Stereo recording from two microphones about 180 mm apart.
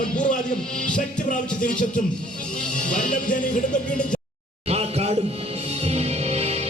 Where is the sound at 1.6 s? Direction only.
45° left (ahead or behind).